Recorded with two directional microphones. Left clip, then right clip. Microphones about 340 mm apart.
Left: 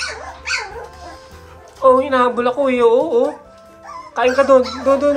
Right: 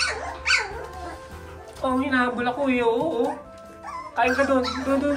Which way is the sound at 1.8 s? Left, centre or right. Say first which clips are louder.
Left 11 dB; centre.